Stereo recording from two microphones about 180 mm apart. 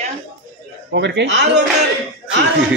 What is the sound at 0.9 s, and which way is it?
Speech, 75° right (ahead or behind).